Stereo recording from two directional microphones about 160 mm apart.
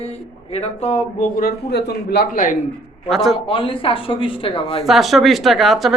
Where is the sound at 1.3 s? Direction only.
80° left; by 2.5 s 60° left (ahead or behind).